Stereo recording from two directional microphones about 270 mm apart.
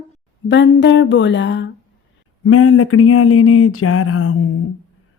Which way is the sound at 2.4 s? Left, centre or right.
Left.